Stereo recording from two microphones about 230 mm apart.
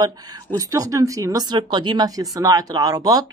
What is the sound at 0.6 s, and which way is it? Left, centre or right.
Speech, centre.